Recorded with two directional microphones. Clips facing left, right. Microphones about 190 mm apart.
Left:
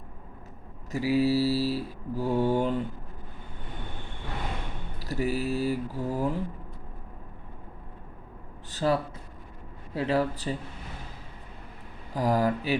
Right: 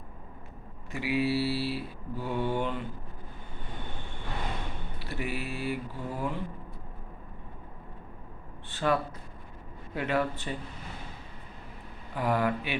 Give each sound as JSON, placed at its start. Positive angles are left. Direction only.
{"t": 0.9, "sound": "mantra", "side_deg": 40}
{"t": 4.9, "sound": "mantra", "side_deg": 40}
{"t": 8.7, "sound": "a sound", "side_deg": 35}
{"t": 9.9, "sound": "mantra", "side_deg": 30}
{"t": 12.1, "sound": "mantra", "side_deg": 35}